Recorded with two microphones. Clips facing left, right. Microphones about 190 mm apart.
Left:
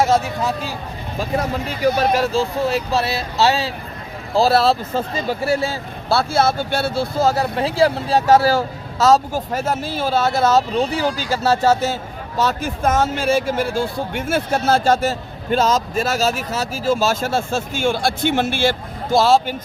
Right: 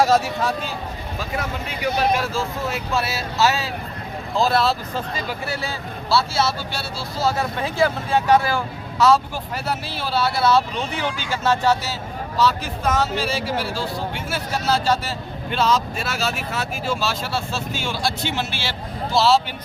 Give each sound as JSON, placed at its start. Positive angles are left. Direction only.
{"t": 1.4, "sound": "speech", "side_deg": 40}